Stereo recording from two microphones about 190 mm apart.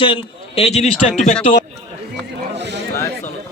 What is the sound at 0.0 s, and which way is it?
Speech, 25° left (ahead or behind).